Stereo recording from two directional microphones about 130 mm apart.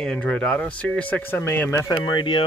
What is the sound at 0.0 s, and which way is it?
Speech, 5° left (ahead or behind).